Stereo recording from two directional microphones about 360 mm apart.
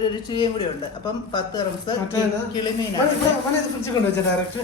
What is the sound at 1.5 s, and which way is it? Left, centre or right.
Speech, centre.